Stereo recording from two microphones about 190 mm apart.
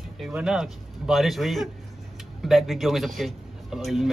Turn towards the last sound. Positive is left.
turn(degrees=0)  # may be behind; listen again after turning